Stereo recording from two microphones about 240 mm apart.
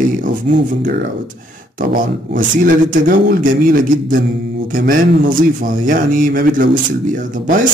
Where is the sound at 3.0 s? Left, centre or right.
Right.